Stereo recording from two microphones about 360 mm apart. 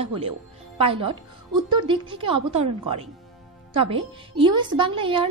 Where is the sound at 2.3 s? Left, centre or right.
Right.